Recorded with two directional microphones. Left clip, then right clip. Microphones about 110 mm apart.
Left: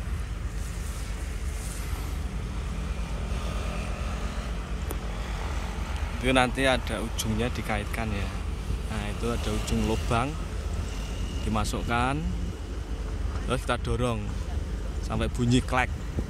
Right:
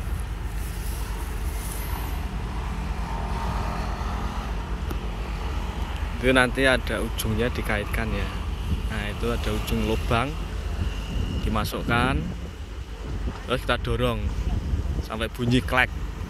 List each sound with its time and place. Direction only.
6.2 s speech: 15° left (ahead or behind)
11.5 s speech: 20° left (ahead or behind)
13.5 s speech: 20° left (ahead or behind)